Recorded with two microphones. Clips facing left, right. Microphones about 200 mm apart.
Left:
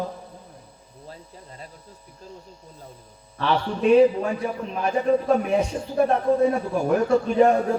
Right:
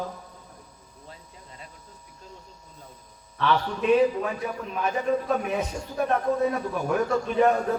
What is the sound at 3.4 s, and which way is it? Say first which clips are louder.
A man's voice: left 1 dB; 35° left (ahead or behind).